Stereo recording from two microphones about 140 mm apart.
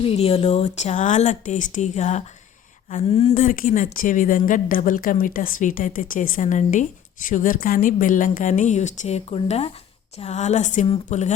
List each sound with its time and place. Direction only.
0.0 s a woman's voice: 45° left (ahead or behind)
3.3 s a woman's voice: 85° left
5.2 s a woman's voice: 90° left; by 6.8 s 65° left (ahead or behind)
7.3 s a woman's voice: 75° left (ahead or behind); by 11.3 s 60° left (ahead or behind)